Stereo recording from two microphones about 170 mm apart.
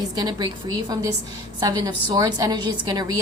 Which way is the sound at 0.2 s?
25° right (ahead or behind).